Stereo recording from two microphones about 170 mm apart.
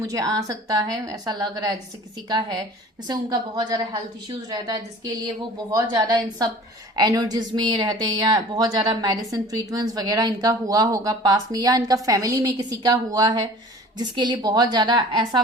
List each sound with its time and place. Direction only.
0.0 s speech: 20° right (ahead or behind)
3.1 s speech: 25° right (ahead or behind)